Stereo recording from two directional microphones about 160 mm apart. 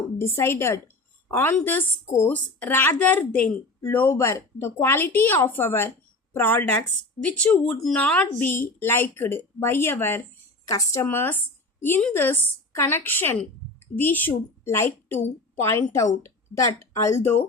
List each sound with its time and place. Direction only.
0.2 s a woman's voice: 15° left (ahead or behind)
16.9 s speech: 15° left (ahead or behind)